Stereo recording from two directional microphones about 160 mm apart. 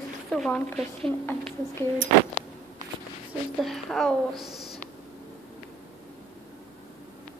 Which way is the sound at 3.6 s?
Centre (ahead or behind).